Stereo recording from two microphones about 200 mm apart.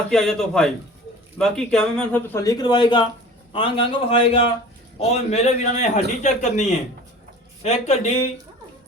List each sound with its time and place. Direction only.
0.1 s a man's voice: centre (ahead or behind); by 8.1 s 35° left (ahead or behind)